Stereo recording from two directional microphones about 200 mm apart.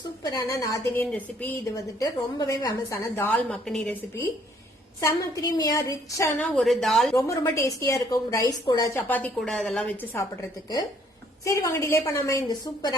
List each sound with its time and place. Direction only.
0.2 s a woman's voice: 20° left (ahead or behind); by 3.9 s centre (ahead or behind)
4.9 s a woman's voice: 15° left (ahead or behind)
6.4 s speech: centre (ahead or behind)
7.2 s a woman's voice: 15° left (ahead or behind)
11.4 s a woman's voice: 15° left (ahead or behind)